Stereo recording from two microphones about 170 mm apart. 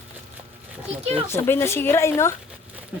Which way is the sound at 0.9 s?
35° right (ahead or behind).